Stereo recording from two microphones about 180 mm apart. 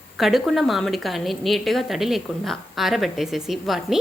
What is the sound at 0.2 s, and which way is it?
A woman's voice, centre (ahead or behind).